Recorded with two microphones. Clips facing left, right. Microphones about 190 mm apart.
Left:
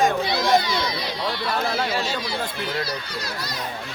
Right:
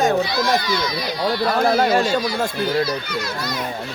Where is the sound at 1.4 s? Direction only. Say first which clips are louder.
Right 9 dB; 50° right (ahead or behind).